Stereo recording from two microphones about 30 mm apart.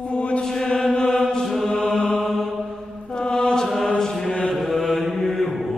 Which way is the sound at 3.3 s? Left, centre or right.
Centre.